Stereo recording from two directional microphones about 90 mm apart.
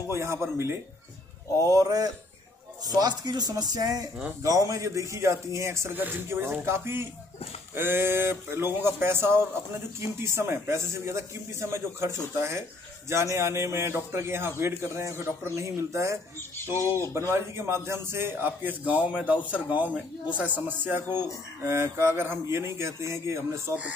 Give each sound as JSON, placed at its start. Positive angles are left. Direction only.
{"t": 0.1, "sound": "speech", "side_deg": -30}
{"t": 1.7, "sound": "speech", "side_deg": -40}
{"t": 16.3, "sound": "speech", "side_deg": 25}
{"t": 17.3, "sound": "speech", "side_deg": -30}